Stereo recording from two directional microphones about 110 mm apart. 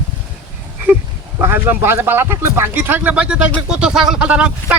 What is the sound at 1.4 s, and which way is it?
Speech, 20° right (ahead or behind).